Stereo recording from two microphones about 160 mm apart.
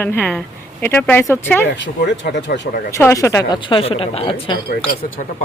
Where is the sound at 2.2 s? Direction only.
75° left (ahead or behind).